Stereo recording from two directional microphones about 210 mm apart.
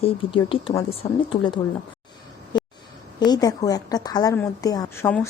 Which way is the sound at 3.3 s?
15° left (ahead or behind).